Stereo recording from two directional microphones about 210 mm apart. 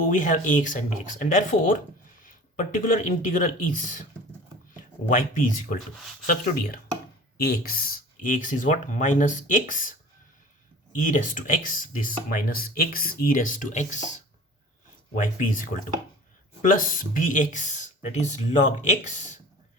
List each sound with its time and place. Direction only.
0.1 s speech: 40° left (ahead or behind)
5.1 s speech: 40° left (ahead or behind)
10.9 s speech: 40° left (ahead or behind)
15.2 s speech: 40° left (ahead or behind)